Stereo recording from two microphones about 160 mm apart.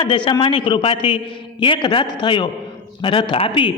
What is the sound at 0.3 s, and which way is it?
A man's voice, 30° left (ahead or behind).